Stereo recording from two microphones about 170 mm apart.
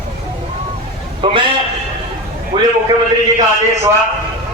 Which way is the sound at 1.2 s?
30° right (ahead or behind).